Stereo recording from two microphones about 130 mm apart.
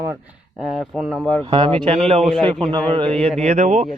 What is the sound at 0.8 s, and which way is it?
Speech, 5° right (ahead or behind).